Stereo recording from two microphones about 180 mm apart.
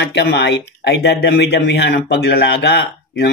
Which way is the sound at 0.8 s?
65° left (ahead or behind).